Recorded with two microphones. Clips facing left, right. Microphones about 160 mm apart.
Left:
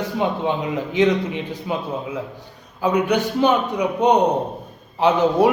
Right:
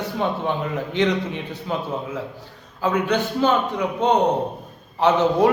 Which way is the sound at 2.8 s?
15° left (ahead or behind).